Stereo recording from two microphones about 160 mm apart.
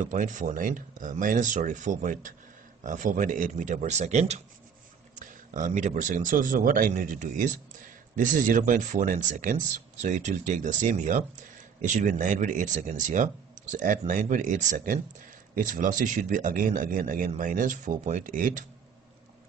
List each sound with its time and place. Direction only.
0.0 s speech: 55° right (ahead or behind)